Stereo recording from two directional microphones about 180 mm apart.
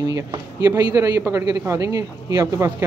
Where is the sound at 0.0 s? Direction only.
20° right (ahead or behind).